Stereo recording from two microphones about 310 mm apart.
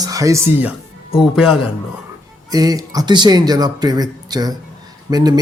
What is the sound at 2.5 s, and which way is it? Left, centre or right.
Speech, centre.